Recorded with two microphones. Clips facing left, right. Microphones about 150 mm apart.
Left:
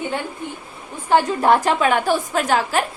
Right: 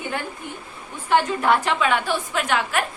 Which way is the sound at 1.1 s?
40° left (ahead or behind).